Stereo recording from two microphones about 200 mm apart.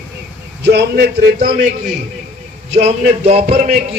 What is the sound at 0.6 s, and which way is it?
A man's voice, 55° right (ahead or behind).